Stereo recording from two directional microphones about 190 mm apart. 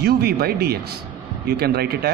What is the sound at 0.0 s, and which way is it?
Speech, 55° right (ahead or behind).